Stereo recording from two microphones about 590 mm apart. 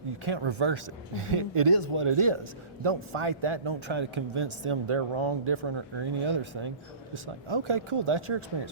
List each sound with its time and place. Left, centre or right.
0.3 s a man's voice: right